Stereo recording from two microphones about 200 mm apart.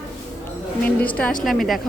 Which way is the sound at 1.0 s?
5° left (ahead or behind).